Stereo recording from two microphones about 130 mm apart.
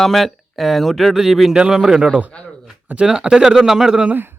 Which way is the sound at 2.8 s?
10° right (ahead or behind).